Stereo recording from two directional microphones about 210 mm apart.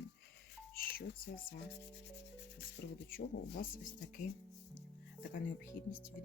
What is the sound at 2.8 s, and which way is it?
Speech, 50° left (ahead or behind).